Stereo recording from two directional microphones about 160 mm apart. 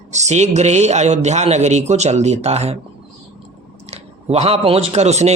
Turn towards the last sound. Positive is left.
turn(degrees=-45)  # may be behind; listen again after turning